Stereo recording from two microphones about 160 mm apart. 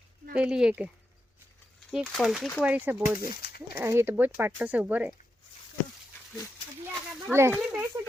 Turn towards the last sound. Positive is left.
turn(degrees=-15)  # may be behind; listen again after turning